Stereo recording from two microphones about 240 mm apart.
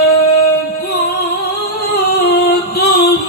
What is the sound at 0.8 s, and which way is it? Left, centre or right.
Music, left.